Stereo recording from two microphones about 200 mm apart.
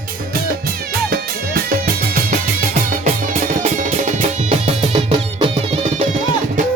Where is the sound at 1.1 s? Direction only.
45° right (ahead or behind); by 6.0 s 30° right (ahead or behind).